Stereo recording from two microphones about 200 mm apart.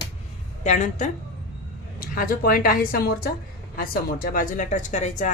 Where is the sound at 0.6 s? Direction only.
35° left (ahead or behind).